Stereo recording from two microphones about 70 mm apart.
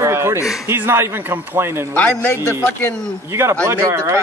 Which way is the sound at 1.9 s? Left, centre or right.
Left.